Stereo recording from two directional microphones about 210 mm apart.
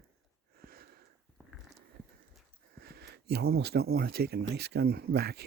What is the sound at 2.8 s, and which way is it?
Speech, 50° right (ahead or behind).